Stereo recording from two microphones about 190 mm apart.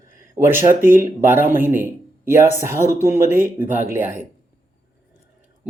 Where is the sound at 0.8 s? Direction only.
45° right (ahead or behind).